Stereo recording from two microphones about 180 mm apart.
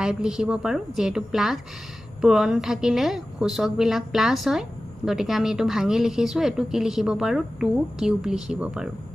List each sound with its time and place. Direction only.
0.0 s a woman's voice: 5° right (ahead or behind)